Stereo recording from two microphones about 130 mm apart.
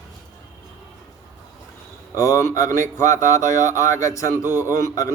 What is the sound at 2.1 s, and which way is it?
Speech, 25° left (ahead or behind).